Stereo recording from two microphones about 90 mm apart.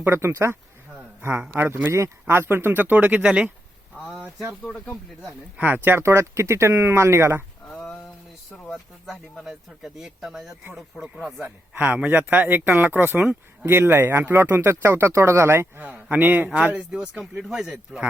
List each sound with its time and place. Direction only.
0.0 s speech: 30° right (ahead or behind); by 3.5 s 10° right (ahead or behind)
4.6 s speech: 10° left (ahead or behind)
5.5 s speech: 20° right (ahead or behind)
7.7 s a sound: 5° left (ahead or behind)
8.4 s speech: 5° left (ahead or behind)
11.4 s speech: 15° right (ahead or behind)